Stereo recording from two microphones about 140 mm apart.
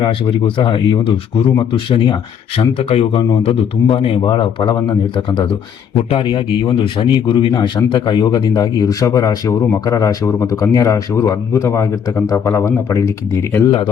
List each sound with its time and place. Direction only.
0.0 s speech: 35° left (ahead or behind)
2.7 s speech: 45° left (ahead or behind); by 13.7 s 15° left (ahead or behind)